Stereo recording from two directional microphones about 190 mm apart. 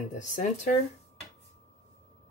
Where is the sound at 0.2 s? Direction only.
40° left (ahead or behind).